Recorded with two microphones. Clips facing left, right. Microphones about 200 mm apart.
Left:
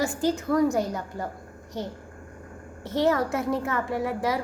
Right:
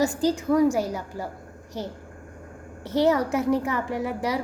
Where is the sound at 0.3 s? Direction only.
10° right (ahead or behind).